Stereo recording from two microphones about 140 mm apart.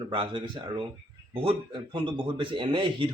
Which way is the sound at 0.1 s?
35° right (ahead or behind).